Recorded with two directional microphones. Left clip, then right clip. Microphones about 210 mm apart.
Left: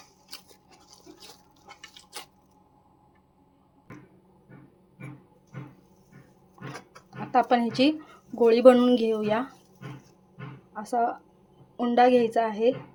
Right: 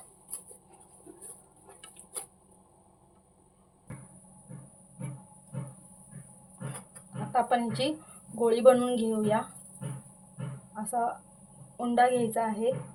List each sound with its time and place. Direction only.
7.3 s speech: 35° left (ahead or behind)
10.8 s speech: 35° left (ahead or behind)